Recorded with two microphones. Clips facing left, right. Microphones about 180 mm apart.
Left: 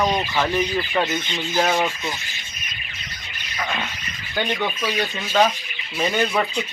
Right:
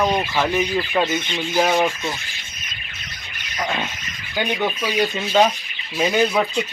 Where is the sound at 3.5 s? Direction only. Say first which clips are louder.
Right 3 dB; 20° right (ahead or behind).